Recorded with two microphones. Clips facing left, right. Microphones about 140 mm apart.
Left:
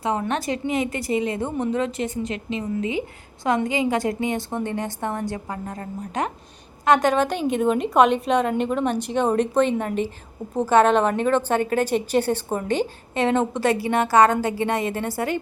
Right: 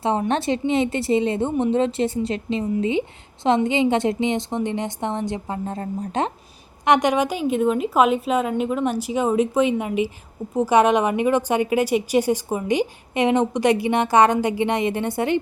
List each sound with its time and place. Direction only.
0.0 s speech: 30° right (ahead or behind)
6.8 s a woman's voice: 20° right (ahead or behind)